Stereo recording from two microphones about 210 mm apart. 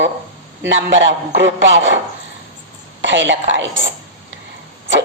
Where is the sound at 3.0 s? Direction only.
60° right (ahead or behind).